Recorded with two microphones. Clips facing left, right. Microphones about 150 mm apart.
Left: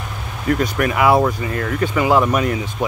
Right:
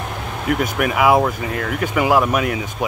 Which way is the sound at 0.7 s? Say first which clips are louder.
Even; 5° right (ahead or behind).